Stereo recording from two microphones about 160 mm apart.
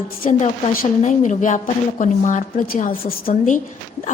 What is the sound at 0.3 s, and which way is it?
A woman's voice, 50° left (ahead or behind).